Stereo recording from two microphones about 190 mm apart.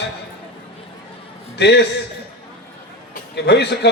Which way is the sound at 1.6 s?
60° left (ahead or behind).